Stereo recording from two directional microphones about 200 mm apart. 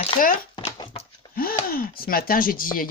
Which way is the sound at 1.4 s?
45° left (ahead or behind).